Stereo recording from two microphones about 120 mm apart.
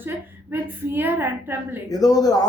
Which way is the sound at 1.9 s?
30° left (ahead or behind).